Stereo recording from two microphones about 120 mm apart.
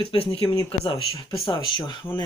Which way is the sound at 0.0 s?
50° left (ahead or behind).